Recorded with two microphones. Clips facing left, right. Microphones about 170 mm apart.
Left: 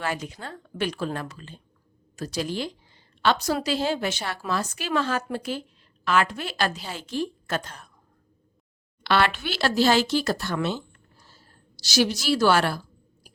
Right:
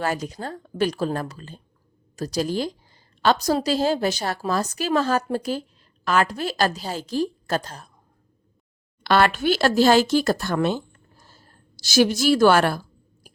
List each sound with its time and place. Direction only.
0.0 s a woman's voice: 40° right (ahead or behind)
9.0 s speech: 45° right (ahead or behind)